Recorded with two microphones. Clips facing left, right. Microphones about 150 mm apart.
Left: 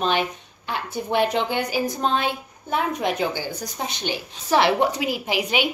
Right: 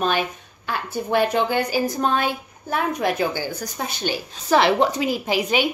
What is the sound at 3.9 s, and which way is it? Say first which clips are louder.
A woman's voice: right 2 dB; 20° left (ahead or behind).